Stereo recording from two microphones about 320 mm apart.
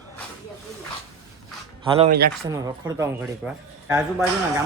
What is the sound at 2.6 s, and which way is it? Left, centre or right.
Speech, centre.